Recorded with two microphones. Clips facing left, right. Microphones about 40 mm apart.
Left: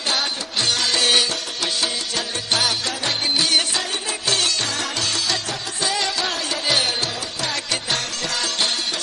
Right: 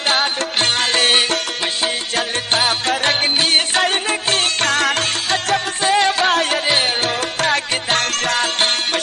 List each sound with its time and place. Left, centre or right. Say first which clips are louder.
0.1 s music: right 6 dB; right
6.7 s music: right 4 dB; right